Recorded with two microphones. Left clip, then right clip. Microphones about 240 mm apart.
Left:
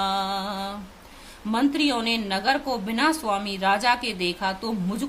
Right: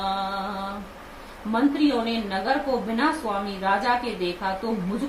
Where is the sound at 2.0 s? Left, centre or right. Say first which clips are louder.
Left 3 dB; left.